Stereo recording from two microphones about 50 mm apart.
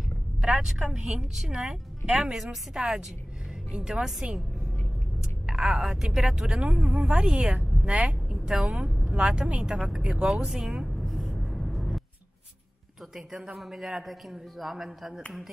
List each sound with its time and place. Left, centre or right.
0.4 s a woman's voice: centre
5.5 s speech: centre
10.9 s music: centre
13.6 s a man's voice: centre